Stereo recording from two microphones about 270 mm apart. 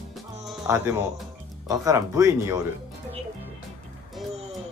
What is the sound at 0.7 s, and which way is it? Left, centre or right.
Speech, centre.